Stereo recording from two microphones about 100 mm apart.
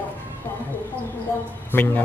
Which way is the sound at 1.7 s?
20° left (ahead or behind).